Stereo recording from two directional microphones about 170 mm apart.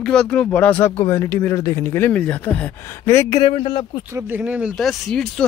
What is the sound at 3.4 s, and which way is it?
Speech, 35° left (ahead or behind).